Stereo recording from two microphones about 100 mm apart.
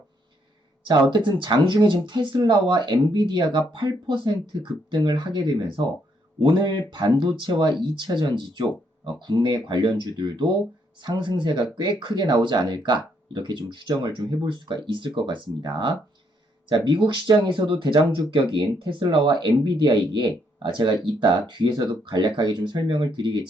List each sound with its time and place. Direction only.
0.9 s speech: 55° right (ahead or behind)